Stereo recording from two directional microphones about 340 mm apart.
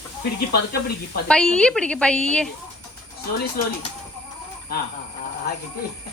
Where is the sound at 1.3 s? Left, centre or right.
Centre.